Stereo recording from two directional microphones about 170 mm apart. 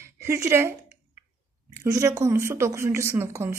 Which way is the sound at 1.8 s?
20° right (ahead or behind).